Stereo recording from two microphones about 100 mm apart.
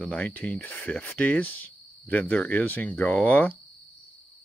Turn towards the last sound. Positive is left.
turn(degrees=15)  # may be behind; listen again after turning